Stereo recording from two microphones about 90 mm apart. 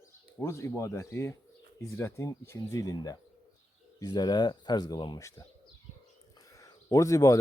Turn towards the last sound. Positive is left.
turn(degrees=35)  # may be behind; listen again after turning